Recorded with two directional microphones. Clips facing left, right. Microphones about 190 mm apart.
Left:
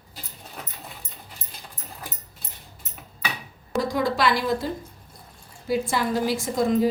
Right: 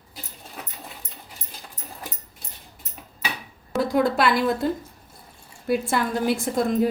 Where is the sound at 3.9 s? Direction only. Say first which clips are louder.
Right 4 dB; 55° right (ahead or behind).